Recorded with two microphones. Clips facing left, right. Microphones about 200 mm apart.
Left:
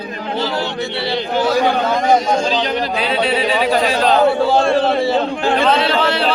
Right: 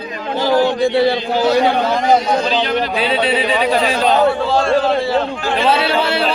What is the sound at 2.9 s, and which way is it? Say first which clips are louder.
Speech: even; centre (ahead or behind).